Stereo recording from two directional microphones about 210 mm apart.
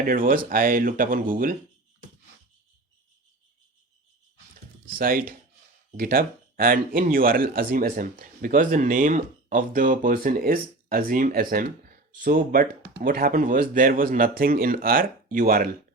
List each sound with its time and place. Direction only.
0.0 s speech: 40° right (ahead or behind)
4.9 s speech: 45° right (ahead or behind)